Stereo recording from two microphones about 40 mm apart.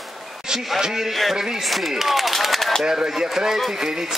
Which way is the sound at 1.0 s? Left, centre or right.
Centre.